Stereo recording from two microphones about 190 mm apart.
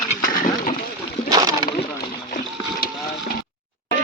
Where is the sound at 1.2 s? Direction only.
20° right (ahead or behind).